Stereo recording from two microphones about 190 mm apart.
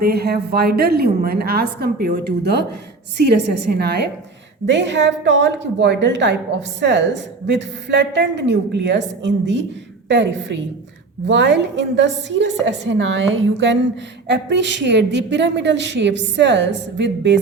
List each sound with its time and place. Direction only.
0.0 s a woman's voice: 55° right (ahead or behind)
4.7 s a woman's voice: 70° right (ahead or behind)